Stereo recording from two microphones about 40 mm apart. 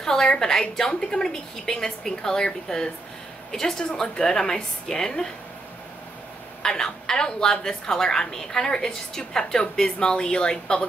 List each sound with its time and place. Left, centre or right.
0.0 s a sound: centre
0.4 s a woman's voice: centre
6.6 s a woman's voice: centre